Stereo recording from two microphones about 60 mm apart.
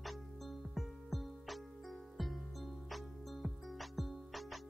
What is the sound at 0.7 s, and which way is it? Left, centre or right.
Music, centre.